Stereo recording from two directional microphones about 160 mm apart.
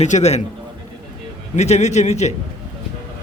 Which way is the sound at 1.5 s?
45° left (ahead or behind).